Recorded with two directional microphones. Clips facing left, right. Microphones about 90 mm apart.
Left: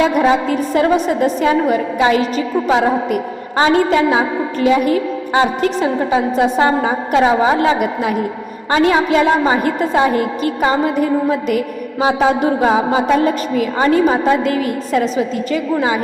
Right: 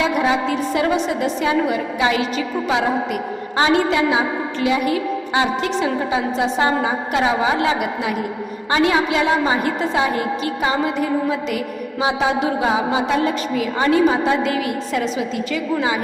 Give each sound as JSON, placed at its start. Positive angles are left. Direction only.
{"t": 0.0, "sound": "a woman's voice", "side_deg": 45}